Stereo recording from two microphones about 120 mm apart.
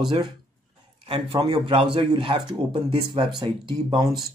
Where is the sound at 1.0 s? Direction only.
50° right (ahead or behind).